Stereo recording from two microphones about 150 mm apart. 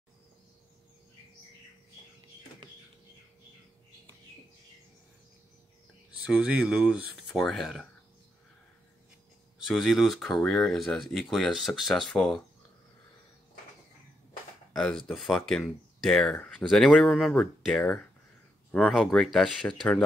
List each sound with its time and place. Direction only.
6.2 s speech: 5° right (ahead or behind)
9.7 s speech: centre (ahead or behind)
14.7 s speech: centre (ahead or behind)